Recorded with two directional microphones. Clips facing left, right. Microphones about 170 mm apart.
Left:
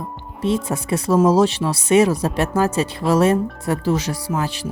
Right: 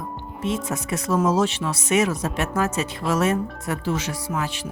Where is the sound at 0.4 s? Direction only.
30° left (ahead or behind).